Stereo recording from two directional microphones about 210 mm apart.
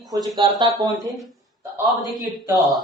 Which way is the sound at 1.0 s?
Centre (ahead or behind).